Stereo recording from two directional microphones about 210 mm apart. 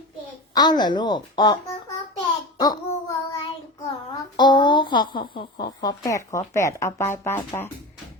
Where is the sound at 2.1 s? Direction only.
20° left (ahead or behind).